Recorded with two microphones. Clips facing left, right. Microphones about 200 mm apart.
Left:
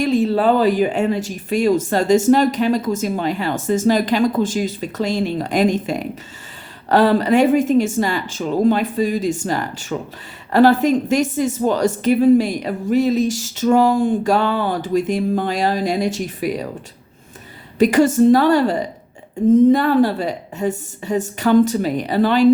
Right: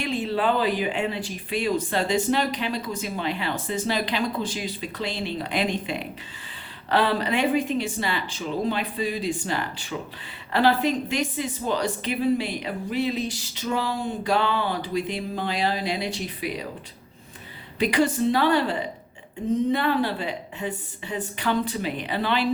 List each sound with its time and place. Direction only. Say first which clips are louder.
0.0 s speech: left 9 dB; 40° left (ahead or behind)
17.7 s speech: left 9 dB; 45° left (ahead or behind)